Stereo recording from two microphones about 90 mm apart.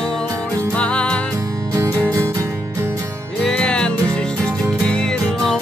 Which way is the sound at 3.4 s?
10° left (ahead or behind).